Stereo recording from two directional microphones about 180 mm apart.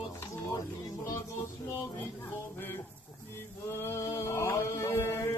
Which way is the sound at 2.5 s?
10° left (ahead or behind).